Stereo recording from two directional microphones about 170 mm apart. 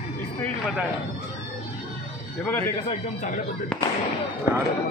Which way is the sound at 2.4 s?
10° left (ahead or behind).